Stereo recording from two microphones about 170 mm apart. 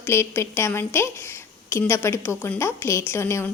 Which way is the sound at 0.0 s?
15° left (ahead or behind).